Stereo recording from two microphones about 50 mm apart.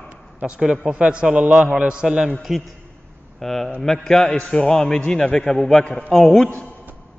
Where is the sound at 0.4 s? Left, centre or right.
Centre.